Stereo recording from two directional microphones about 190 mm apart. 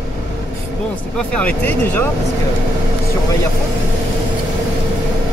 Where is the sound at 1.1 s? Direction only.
5° left (ahead or behind).